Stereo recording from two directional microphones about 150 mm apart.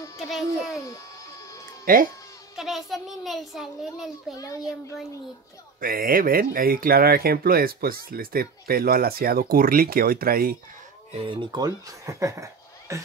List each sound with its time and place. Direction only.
0.3 s a child's voice: centre (ahead or behind)
1.9 s speech: 70° right (ahead or behind)
2.5 s music: centre (ahead or behind)
2.9 s a child's voice: centre (ahead or behind)
5.8 s speech: 75° right (ahead or behind)
11.1 s speech: 30° right (ahead or behind)